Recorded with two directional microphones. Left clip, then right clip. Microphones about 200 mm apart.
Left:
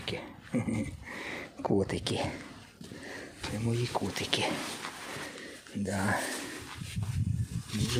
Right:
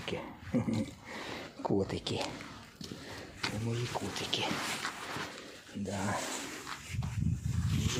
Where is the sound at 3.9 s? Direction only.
35° left (ahead or behind).